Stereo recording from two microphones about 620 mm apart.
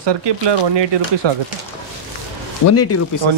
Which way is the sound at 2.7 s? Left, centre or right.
Left.